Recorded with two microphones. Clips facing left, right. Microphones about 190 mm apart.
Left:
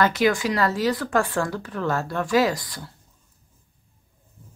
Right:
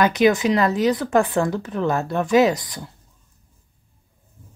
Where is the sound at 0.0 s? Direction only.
20° right (ahead or behind).